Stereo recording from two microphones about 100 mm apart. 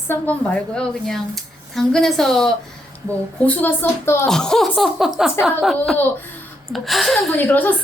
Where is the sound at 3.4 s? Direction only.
15° left (ahead or behind).